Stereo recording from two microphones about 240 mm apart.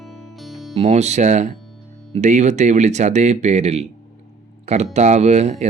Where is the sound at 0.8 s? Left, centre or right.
Right.